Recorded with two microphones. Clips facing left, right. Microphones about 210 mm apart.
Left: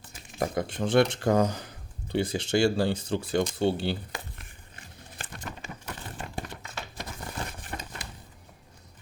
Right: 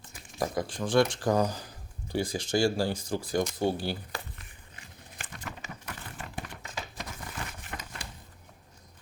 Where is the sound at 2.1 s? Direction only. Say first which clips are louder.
Left 3 dB; 25° left (ahead or behind).